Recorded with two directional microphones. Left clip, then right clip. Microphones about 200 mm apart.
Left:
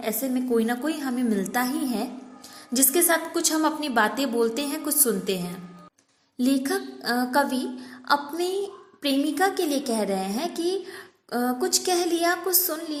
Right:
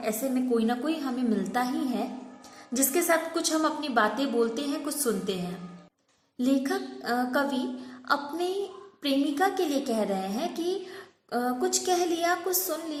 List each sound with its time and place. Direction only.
0.0 s a woman's voice: 35° left (ahead or behind)
6.4 s a woman's voice: 40° left (ahead or behind)